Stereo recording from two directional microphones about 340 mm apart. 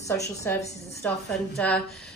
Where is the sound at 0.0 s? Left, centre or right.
Centre.